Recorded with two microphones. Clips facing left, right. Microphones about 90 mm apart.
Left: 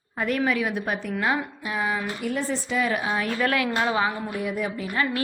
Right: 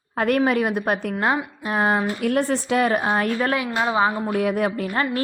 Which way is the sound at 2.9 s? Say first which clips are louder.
Right 5 dB; 45° right (ahead or behind).